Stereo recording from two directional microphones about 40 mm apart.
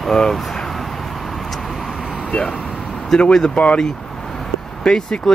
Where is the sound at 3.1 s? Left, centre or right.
Centre.